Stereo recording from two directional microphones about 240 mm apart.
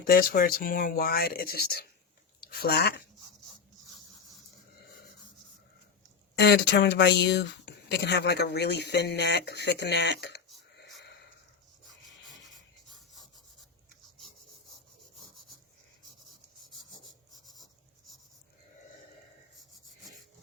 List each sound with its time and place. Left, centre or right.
0.0 s speech: left
6.4 s speech: left